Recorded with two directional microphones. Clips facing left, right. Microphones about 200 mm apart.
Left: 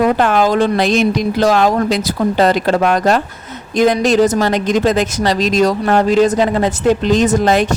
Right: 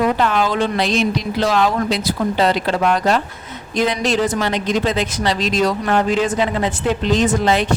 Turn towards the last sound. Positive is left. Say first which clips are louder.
# left 4 dB
turn(degrees=45)  # may be behind; listen again after turning